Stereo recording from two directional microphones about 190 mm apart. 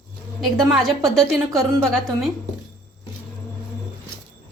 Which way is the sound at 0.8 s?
Centre (ahead or behind).